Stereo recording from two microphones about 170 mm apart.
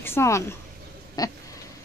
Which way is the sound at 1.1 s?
20° left (ahead or behind).